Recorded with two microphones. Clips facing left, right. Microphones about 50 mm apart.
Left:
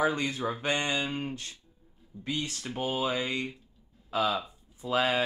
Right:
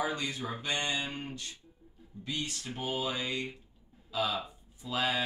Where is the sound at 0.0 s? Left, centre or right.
Left.